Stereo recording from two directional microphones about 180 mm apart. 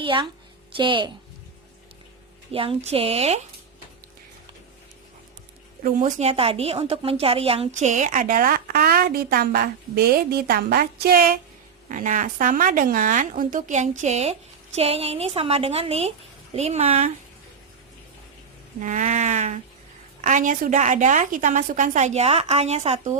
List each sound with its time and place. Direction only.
0.0 s a woman's voice: 25° right (ahead or behind)
2.5 s a woman's voice: 30° right (ahead or behind)
5.8 s a woman's voice: 40° right (ahead or behind); by 11.3 s 55° right (ahead or behind)
11.9 s a woman's voice: 45° right (ahead or behind)
18.8 s a woman's voice: 45° right (ahead or behind)